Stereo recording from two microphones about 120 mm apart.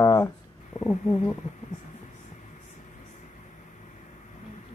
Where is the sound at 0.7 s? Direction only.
50° left (ahead or behind).